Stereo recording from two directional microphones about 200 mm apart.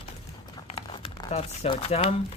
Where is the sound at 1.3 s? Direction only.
30° left (ahead or behind).